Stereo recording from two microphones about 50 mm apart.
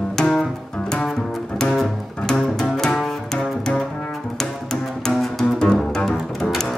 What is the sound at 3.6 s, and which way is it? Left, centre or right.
Double bass, centre.